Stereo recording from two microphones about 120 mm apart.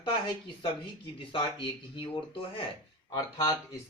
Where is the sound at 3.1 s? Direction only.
30° left (ahead or behind).